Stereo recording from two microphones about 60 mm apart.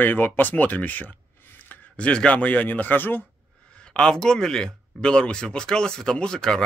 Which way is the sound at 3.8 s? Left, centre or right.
Centre.